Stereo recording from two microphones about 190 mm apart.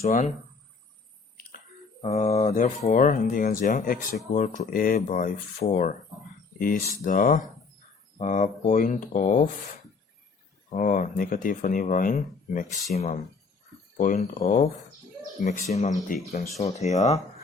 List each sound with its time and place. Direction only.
0.0 s speech: 40° left (ahead or behind)
2.0 s speech: 35° left (ahead or behind)
10.7 s speech: 40° left (ahead or behind)
13.9 s speech: 40° left (ahead or behind)